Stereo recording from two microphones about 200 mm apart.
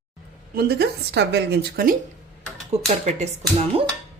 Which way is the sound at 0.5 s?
50° right (ahead or behind).